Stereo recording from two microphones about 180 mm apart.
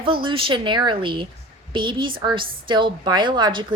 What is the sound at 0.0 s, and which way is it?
A woman's voice, 30° right (ahead or behind).